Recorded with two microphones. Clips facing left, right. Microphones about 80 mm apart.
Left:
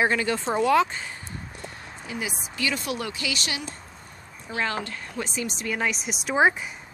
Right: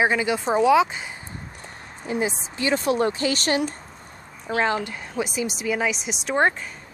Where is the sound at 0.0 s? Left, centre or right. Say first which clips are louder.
Right 2 dB; centre.